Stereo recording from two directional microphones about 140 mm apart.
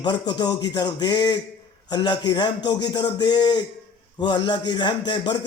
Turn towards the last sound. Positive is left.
turn(degrees=35)  # may be behind; listen again after turning